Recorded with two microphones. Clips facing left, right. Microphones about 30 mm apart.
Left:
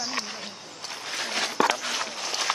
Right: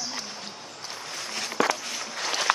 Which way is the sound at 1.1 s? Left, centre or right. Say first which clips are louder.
Left 6 dB; left.